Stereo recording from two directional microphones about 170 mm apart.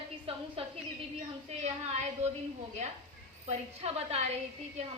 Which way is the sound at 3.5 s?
40° right (ahead or behind).